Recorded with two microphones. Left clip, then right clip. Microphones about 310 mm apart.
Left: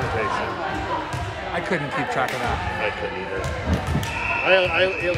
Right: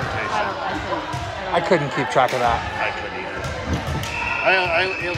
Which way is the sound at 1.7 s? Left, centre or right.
Centre.